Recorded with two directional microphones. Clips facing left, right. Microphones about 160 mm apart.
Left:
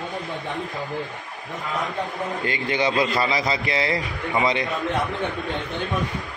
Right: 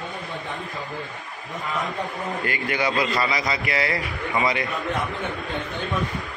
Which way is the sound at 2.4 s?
25° left (ahead or behind).